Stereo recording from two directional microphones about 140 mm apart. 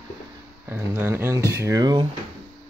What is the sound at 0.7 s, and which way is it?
Speech, 15° right (ahead or behind).